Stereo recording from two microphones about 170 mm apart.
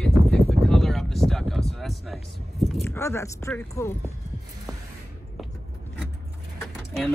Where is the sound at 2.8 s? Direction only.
15° left (ahead or behind).